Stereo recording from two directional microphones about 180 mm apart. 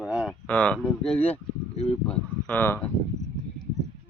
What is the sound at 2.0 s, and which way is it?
Speech, 10° left (ahead or behind).